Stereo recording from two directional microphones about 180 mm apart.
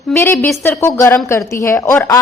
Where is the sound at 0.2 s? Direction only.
15° left (ahead or behind).